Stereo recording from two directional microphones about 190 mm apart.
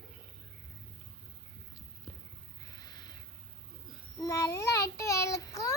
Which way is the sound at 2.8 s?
20° left (ahead or behind).